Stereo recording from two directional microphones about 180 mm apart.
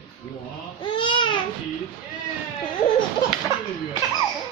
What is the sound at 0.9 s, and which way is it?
Baby cry, 25° left (ahead or behind).